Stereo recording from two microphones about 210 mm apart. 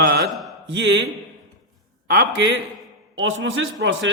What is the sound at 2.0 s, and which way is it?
A man's voice, 50° right (ahead or behind).